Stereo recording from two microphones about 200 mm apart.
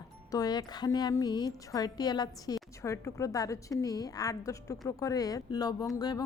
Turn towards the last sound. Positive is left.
turn(degrees=20)  # may be behind; listen again after turning